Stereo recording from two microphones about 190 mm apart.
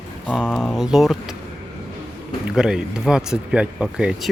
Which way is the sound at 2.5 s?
5° right (ahead or behind).